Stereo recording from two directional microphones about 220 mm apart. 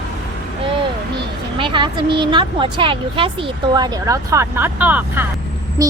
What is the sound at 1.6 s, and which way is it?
Speech, 20° right (ahead or behind).